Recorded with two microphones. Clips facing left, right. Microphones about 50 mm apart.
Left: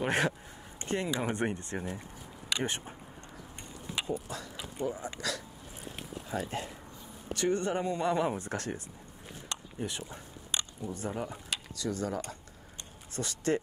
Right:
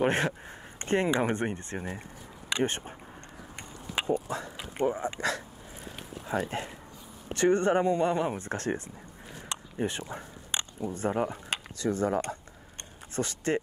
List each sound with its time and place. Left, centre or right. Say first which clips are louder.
0.0 s speech: right 3 dB; right
4.0 s a sound: right 5 dB; right
4.3 s speech: right 5 dB; right
9.5 s biting: right 6 dB; right
10.8 s speech: right 10 dB; right